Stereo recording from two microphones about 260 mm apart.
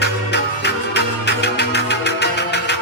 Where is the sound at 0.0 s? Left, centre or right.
Left.